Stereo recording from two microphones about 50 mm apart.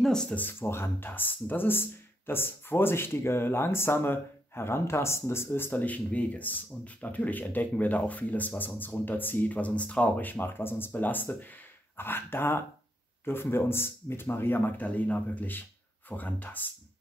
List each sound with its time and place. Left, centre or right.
0.0 s a sound: centre
0.5 s speech: left
5.7 s speech: left
10.2 s speech: left
14.8 s speech: left